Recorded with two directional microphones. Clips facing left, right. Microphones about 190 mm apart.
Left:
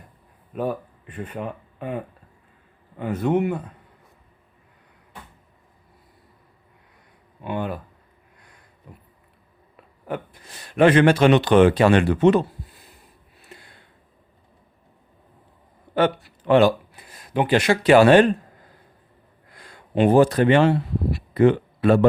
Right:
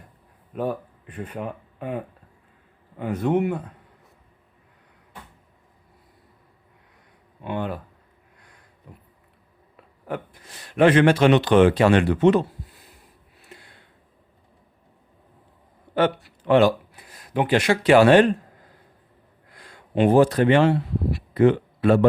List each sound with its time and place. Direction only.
0.5 s speech: 10° left (ahead or behind)
7.4 s speech: 10° left (ahead or behind)
8.9 s a sound: 10° left (ahead or behind)
10.4 s speech: 35° left (ahead or behind)
13.5 s a sound: 35° left (ahead or behind)
16.0 s speech: 45° left (ahead or behind)
19.5 s speech: 40° left (ahead or behind)